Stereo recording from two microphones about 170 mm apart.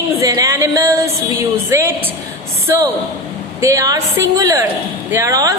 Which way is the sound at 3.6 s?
20° right (ahead or behind).